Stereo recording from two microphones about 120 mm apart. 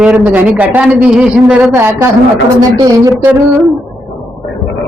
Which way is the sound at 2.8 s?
30° right (ahead or behind).